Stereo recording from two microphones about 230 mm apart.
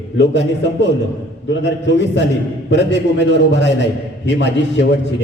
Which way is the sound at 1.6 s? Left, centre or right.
Left.